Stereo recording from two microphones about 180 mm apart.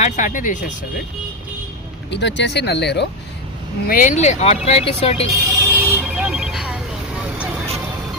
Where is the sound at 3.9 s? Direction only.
45° left (ahead or behind).